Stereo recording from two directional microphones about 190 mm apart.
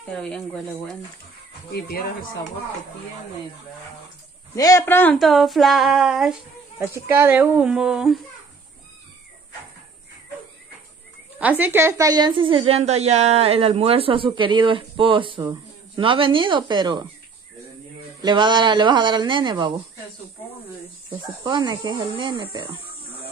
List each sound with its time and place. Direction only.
0.1 s speech: 5° left (ahead or behind)
1.7 s speech: 55° left (ahead or behind)
4.6 s speech: 15° left (ahead or behind); by 6.3 s centre (ahead or behind)
6.8 s speech: 10° right (ahead or behind)
11.3 s a woman's voice: 10° right (ahead or behind); by 17.0 s 25° right (ahead or behind)
18.2 s a woman's voice: 25° right (ahead or behind)
21.1 s a woman's voice: 25° right (ahead or behind)